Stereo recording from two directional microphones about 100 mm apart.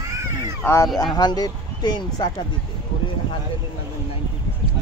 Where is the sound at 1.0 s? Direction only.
45° left (ahead or behind).